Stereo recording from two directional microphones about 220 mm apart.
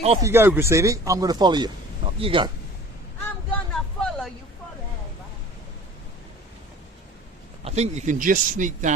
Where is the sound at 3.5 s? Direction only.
5° left (ahead or behind).